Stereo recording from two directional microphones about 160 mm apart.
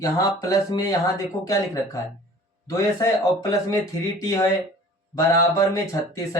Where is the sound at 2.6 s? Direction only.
20° left (ahead or behind).